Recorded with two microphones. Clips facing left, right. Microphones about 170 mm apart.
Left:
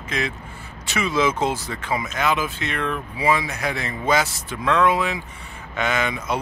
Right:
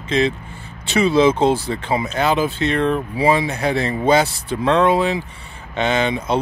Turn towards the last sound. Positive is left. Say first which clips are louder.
# right 5 dB
turn(degrees=-30)  # may be behind; listen again after turning